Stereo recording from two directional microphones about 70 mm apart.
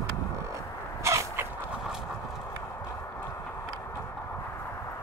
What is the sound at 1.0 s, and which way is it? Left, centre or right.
Crow, right.